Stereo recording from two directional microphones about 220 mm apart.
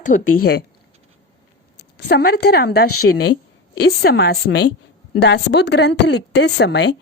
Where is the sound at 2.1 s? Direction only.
45° left (ahead or behind).